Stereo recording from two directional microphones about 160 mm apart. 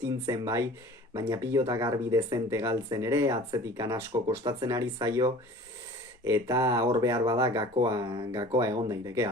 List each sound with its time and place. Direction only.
0.0 s speech: 20° right (ahead or behind)